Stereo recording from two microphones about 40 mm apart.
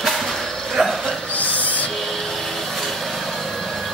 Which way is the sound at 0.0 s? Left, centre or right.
Centre.